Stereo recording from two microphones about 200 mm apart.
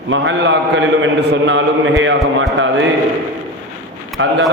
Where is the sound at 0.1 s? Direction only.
65° right (ahead or behind).